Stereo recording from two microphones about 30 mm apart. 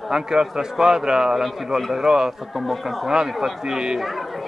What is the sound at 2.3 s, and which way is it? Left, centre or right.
Speech, centre.